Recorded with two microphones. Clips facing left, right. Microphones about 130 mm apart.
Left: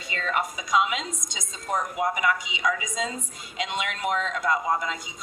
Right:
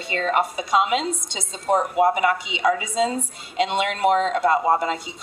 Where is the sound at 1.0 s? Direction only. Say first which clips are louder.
Right 9 dB; 65° right (ahead or behind).